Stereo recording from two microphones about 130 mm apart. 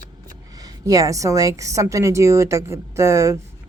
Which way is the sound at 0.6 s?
25° right (ahead or behind).